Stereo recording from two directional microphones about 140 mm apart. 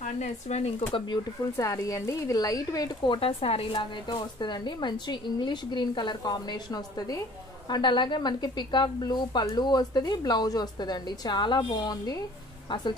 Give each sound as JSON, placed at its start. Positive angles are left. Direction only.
{"t": 0.0, "sound": "speech", "side_deg": 55}
{"t": 0.9, "sound": "a woman's voice", "side_deg": 35}
{"t": 1.6, "sound": "speech", "side_deg": 20}
{"t": 3.2, "sound": "a woman's voice", "side_deg": 40}